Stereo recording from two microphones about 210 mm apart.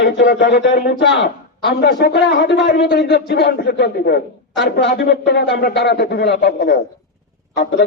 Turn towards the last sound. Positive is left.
turn(degrees=45)  # may be behind; listen again after turning